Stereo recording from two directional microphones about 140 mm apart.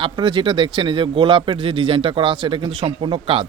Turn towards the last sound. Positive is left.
turn(degrees=-40)  # may be behind; listen again after turning